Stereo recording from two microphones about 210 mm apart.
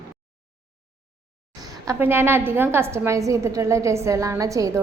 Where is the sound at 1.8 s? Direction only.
10° right (ahead or behind).